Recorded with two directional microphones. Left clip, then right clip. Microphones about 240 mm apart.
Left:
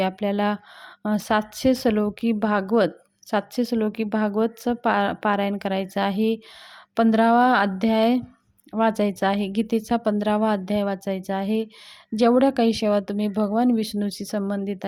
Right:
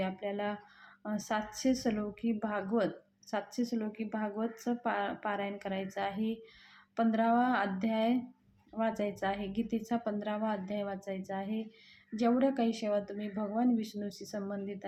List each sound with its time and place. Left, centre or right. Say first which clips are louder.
0.0 s speech: left 12 dB; left